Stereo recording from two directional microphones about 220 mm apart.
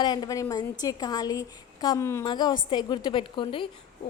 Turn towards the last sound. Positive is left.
turn(degrees=20)  # may be behind; listen again after turning